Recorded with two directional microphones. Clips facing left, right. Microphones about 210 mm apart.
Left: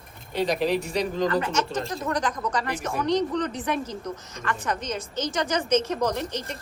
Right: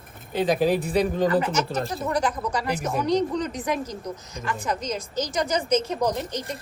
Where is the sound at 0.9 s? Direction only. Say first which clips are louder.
Right 3 dB; 55° right (ahead or behind).